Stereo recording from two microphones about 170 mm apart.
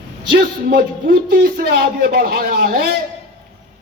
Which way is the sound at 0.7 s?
60° right (ahead or behind).